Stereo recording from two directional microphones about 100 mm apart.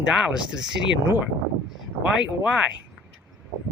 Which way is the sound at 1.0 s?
20° right (ahead or behind).